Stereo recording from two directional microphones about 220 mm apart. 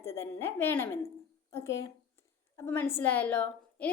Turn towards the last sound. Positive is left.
turn(degrees=5)  # may be behind; listen again after turning